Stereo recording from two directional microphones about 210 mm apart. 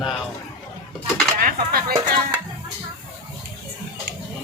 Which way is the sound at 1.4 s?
45° right (ahead or behind).